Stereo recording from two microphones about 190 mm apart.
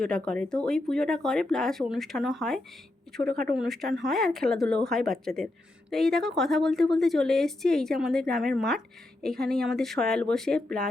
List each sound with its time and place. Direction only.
0.0 s speech: 5° left (ahead or behind)
3.2 s speech: 50° right (ahead or behind)
3.5 s speech: centre (ahead or behind)